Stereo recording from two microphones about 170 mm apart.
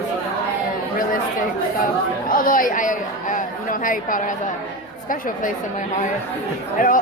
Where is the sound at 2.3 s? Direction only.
55° left (ahead or behind).